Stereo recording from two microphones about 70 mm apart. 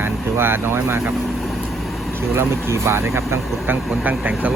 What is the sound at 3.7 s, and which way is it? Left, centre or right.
Speech, right.